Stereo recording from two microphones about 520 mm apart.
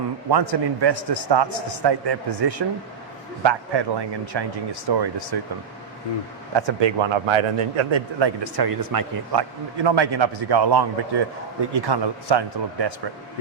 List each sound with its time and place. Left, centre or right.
0.3 s a man's voice: right
6.5 s a man's voice: right